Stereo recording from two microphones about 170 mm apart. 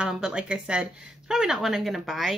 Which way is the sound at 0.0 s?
5° right (ahead or behind).